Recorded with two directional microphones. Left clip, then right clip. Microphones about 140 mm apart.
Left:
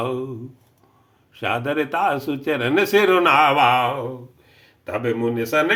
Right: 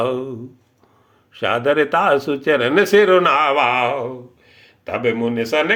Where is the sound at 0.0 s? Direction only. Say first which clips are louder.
Right 5 dB; 25° right (ahead or behind).